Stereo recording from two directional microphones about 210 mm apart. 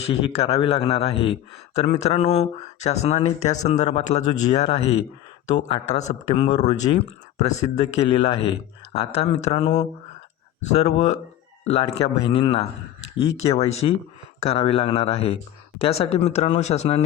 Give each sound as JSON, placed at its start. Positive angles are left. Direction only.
{"t": 0.1, "sound": "a man's voice", "side_deg": 25}